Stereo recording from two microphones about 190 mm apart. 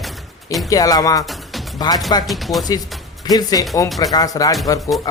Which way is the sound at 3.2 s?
20° left (ahead or behind).